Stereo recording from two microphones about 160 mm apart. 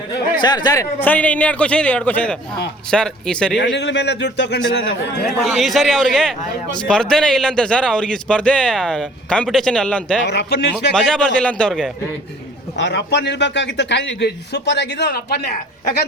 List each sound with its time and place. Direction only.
0.3 s speech: 25° left (ahead or behind)
1.0 s a man's voice: 10° left (ahead or behind)
3.6 s a man's voice: 90° left
5.5 s a man's voice: centre (ahead or behind)
10.2 s a man's voice: 90° left
10.9 s a man's voice: 5° left (ahead or behind)
12.7 s a man's voice: 90° left